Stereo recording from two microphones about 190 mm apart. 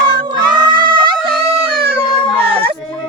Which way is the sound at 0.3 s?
20° right (ahead or behind).